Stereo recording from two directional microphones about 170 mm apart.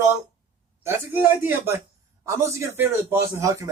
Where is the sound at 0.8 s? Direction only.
10° right (ahead or behind).